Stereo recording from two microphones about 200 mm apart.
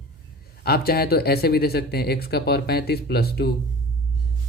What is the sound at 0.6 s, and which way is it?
Speech, 50° left (ahead or behind).